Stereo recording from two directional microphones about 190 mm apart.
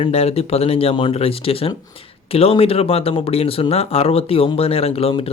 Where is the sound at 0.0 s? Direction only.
35° left (ahead or behind).